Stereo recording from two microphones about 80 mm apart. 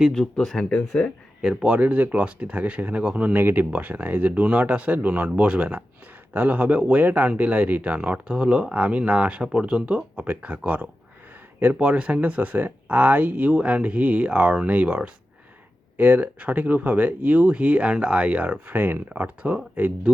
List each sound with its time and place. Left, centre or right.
0.1 s speech: centre
1.4 s speech: centre